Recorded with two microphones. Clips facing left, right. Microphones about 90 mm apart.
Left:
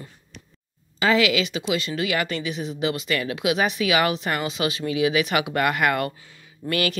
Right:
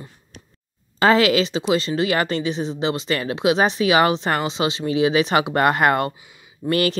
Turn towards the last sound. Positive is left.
turn(degrees=-35)  # may be behind; listen again after turning